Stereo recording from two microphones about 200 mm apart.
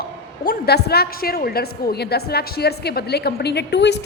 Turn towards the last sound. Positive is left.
turn(degrees=60)  # may be behind; listen again after turning